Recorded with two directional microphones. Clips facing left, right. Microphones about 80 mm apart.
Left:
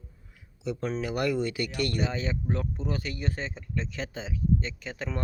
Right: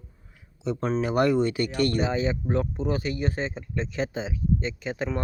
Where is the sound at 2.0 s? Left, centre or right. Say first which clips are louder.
Right 5 dB; centre.